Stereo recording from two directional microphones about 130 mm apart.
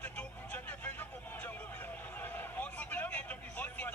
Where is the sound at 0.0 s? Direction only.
10° left (ahead or behind).